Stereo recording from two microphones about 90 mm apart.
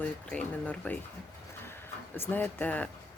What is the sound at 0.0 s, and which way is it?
Speech, 15° left (ahead or behind).